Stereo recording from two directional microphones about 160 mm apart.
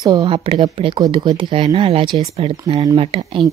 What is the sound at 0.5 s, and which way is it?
Speech, 35° right (ahead or behind).